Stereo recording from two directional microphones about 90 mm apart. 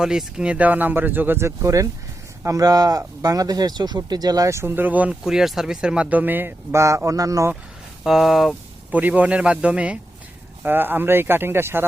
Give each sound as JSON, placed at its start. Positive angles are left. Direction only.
{"t": 0.0, "sound": "speech", "side_deg": -5}
{"t": 5.2, "sound": "speech", "side_deg": -5}
{"t": 8.0, "sound": "speech", "side_deg": -5}
{"t": 8.9, "sound": "speech", "side_deg": -15}